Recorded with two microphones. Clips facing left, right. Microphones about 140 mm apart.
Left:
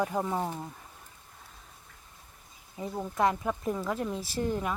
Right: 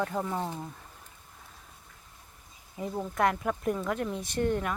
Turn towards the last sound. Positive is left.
turn(degrees=5)  # may be behind; listen again after turning